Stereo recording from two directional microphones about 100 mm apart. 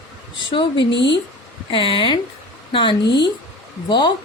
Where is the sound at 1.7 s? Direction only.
60° left (ahead or behind).